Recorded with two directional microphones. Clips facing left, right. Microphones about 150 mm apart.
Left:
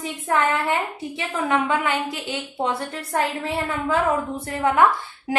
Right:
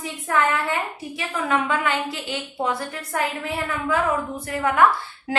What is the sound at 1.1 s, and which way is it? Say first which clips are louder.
A woman's voice: left 1 dB; 20° left (ahead or behind).